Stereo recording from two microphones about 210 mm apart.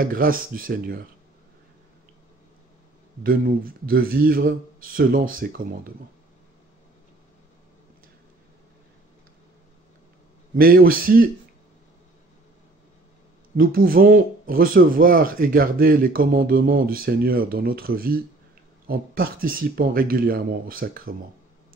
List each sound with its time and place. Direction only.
0.0 s speech: 45° right (ahead or behind)
3.3 s speech: 45° right (ahead or behind)
10.5 s speech: 45° right (ahead or behind)
13.6 s speech: 45° right (ahead or behind)